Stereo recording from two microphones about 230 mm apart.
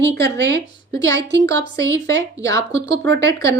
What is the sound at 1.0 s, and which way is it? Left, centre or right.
A woman's voice, centre.